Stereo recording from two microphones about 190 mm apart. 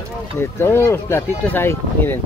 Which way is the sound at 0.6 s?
10° left (ahead or behind).